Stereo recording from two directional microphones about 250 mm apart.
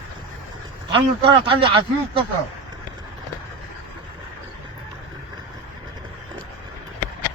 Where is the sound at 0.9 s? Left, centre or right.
Centre.